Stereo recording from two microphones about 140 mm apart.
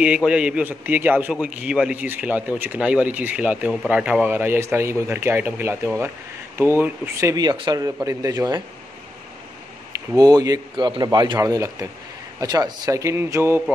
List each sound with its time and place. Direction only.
0.0 s a man's voice: 10° right (ahead or behind); by 8.6 s 25° right (ahead or behind)
10.1 s speech: 25° right (ahead or behind)